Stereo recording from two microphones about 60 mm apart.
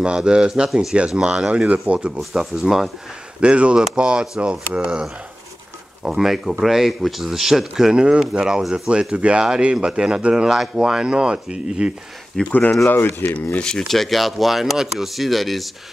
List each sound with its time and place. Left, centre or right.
0.0 s speech: centre
2.1 s speech: centre
3.3 s speech: centre
6.0 s speech: centre
12.4 s speech: left
12.8 s speech: left
13.6 s speech: centre
13.8 s speech: centre